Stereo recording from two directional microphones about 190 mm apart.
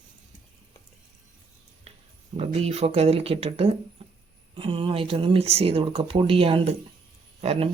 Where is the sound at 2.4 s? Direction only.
35° right (ahead or behind).